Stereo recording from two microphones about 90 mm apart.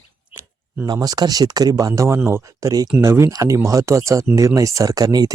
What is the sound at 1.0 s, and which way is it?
Speech, 45° right (ahead or behind).